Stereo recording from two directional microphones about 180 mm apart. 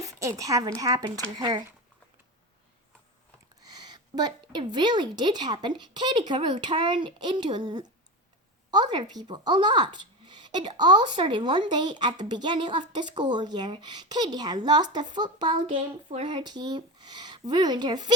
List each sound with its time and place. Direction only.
0.0 s a woman's voice: 20° right (ahead or behind)
3.6 s speech: 25° right (ahead or behind)